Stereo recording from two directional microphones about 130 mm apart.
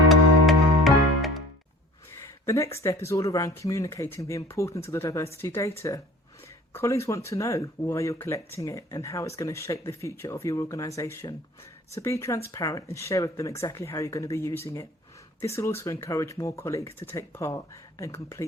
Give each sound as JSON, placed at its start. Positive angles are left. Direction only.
{"t": 0.1, "sound": "music", "side_deg": 0}
{"t": 2.1, "sound": "a sound", "side_deg": 25}
{"t": 3.1, "sound": "speech", "side_deg": 25}
{"t": 6.7, "sound": "speech", "side_deg": 20}